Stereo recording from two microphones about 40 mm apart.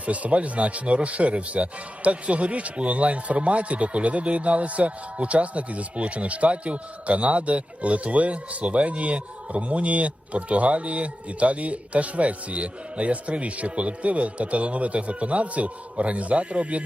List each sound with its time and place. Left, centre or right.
0.0 s speech: right